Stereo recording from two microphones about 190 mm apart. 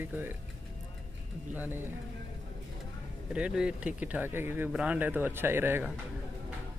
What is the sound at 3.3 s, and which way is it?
Speech, 5° right (ahead or behind).